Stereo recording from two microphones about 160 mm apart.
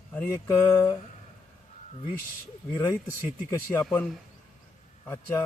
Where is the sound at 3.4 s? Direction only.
15° left (ahead or behind).